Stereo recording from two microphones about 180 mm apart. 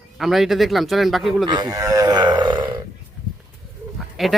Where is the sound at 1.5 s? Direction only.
20° right (ahead or behind).